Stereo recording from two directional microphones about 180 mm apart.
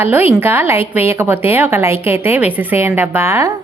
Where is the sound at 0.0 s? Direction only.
10° right (ahead or behind).